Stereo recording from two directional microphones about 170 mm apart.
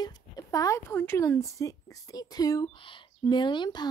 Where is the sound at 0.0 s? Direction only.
20° left (ahead or behind).